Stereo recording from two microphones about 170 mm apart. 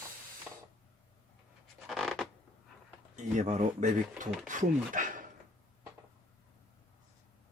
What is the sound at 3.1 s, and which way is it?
Speech, 45° right (ahead or behind).